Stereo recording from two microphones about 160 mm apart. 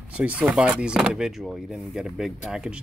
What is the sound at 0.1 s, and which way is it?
Speech, 10° right (ahead or behind).